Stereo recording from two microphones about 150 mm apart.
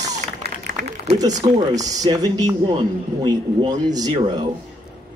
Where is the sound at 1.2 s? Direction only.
25° right (ahead or behind).